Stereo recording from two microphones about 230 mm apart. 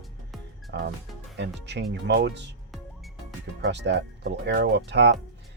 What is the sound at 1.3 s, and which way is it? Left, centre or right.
Speech, right.